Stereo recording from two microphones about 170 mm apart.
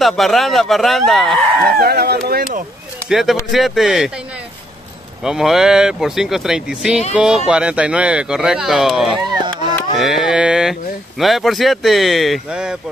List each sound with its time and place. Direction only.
0.0 s speech: centre (ahead or behind)
1.8 s speech: 65° right (ahead or behind)
3.1 s speech: centre (ahead or behind)
5.2 s speech: centre (ahead or behind)
9.4 s chop: 25° right (ahead or behind)
9.9 s speech: centre (ahead or behind)